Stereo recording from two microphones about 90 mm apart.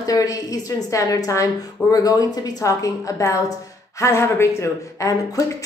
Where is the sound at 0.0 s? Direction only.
40° left (ahead or behind).